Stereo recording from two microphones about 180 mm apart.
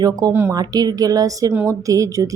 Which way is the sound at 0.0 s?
20° right (ahead or behind).